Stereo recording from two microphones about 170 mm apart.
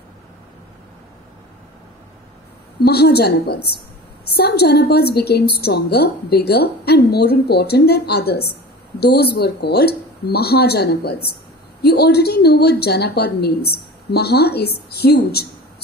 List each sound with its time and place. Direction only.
2.8 s a woman's voice: 70° left (ahead or behind)